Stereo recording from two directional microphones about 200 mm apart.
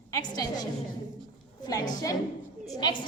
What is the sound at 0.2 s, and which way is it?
A woman's voice, 20° left (ahead or behind).